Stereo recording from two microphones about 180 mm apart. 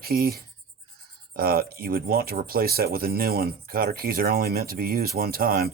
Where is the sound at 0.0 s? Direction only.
55° right (ahead or behind).